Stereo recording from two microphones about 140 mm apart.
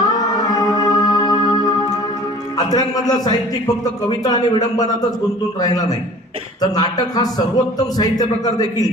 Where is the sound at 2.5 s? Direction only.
30° left (ahead or behind).